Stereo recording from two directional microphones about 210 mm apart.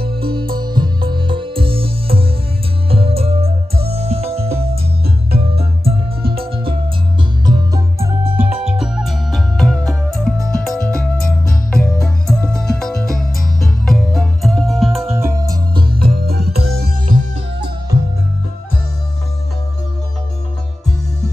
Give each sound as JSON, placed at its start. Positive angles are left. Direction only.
{"t": 0.0, "sound": "music", "side_deg": -45}
{"t": 0.6, "sound": "music", "side_deg": -20}
{"t": 5.0, "sound": "music", "side_deg": -50}
{"t": 5.5, "sound": "music", "side_deg": -30}
{"t": 8.6, "sound": "music", "side_deg": -5}
{"t": 15.0, "sound": "music", "side_deg": -10}
{"t": 16.2, "sound": "music", "side_deg": -45}